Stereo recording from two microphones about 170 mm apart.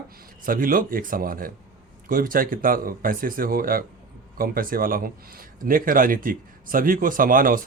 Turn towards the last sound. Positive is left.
turn(degrees=-55)  # may be behind; listen again after turning